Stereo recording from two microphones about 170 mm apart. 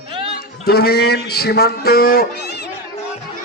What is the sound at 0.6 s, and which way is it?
Speech, 70° left (ahead or behind).